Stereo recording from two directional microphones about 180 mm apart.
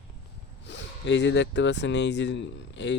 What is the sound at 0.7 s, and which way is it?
Speech, 80° left.